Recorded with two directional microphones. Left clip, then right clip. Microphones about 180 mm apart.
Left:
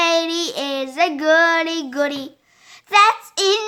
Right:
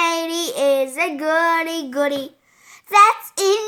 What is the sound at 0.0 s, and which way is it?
Child singing, 20° left (ahead or behind).